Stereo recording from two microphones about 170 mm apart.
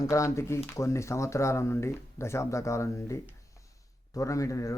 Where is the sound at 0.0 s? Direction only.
20° left (ahead or behind).